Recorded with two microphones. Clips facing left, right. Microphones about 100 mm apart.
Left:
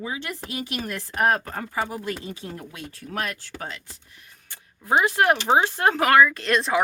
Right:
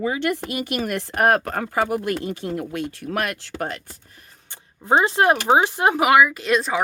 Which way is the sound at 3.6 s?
55° right (ahead or behind).